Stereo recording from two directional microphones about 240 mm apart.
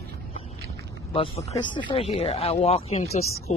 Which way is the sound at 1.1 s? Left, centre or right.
Left.